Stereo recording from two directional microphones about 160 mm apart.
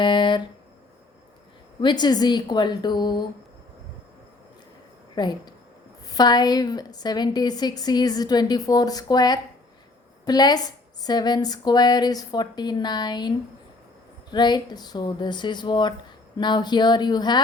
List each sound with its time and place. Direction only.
0.0 s a sound: 30° left (ahead or behind)
1.8 s a woman's voice: 25° left (ahead or behind)
5.1 s a woman's voice: 25° left (ahead or behind)